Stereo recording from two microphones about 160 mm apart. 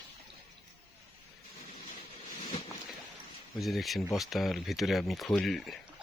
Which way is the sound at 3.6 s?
Centre (ahead or behind).